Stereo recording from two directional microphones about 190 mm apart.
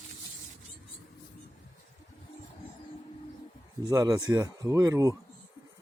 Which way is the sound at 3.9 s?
20° right (ahead or behind).